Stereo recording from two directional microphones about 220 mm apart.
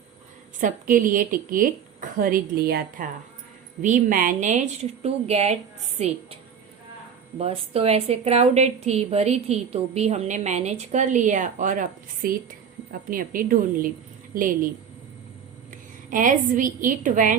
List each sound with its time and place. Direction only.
0.6 s a woman's voice: 40° right (ahead or behind)
7.3 s a woman's voice: 25° right (ahead or behind)
15.7 s a woman's voice: 35° right (ahead or behind)